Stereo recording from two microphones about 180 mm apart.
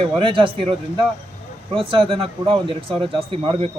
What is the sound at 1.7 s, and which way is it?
A man's voice, 30° right (ahead or behind).